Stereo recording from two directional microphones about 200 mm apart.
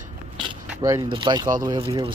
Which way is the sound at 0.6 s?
15° right (ahead or behind).